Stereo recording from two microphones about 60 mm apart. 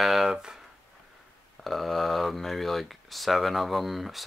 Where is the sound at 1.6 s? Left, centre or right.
Centre.